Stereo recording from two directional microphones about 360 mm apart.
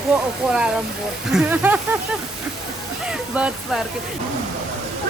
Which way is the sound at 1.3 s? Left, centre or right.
Centre.